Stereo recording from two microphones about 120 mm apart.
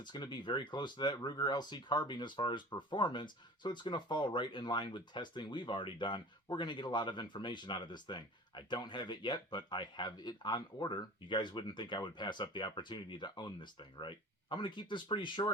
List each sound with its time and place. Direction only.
0.0 s speech: 40° left (ahead or behind)